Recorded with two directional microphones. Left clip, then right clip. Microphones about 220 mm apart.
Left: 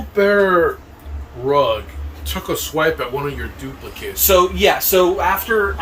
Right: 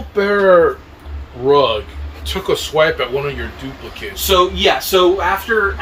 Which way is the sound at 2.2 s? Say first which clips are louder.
Right 5 dB; 15° right (ahead or behind).